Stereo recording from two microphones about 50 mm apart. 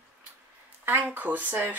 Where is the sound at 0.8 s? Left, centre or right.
Right.